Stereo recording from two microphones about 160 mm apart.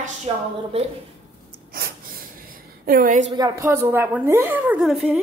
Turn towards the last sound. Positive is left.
turn(degrees=0)  # may be behind; listen again after turning